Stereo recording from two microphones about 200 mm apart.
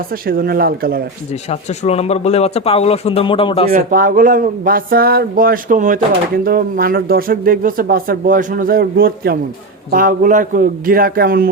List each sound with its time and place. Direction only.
0.3 s speech: 45° right (ahead or behind)
1.5 s speech: 30° left (ahead or behind)
3.7 s speech: 40° right (ahead or behind)